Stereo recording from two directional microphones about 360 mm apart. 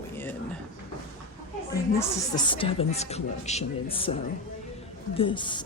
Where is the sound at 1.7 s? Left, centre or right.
Centre.